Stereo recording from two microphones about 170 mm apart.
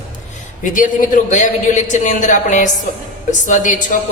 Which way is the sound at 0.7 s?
50° left (ahead or behind).